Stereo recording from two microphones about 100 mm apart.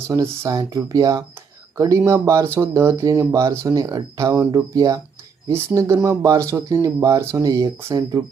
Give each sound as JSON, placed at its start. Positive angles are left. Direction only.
{"t": 0.1, "sound": "speech", "side_deg": -35}
{"t": 5.5, "sound": "speech", "side_deg": -25}